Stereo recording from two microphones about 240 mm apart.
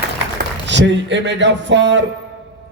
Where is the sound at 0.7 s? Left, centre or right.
Right.